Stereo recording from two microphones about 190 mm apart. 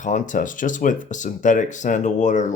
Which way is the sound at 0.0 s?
40° left (ahead or behind).